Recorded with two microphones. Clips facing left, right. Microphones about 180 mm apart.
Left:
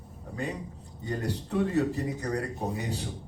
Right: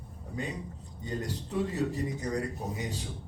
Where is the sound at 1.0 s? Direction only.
60° left (ahead or behind).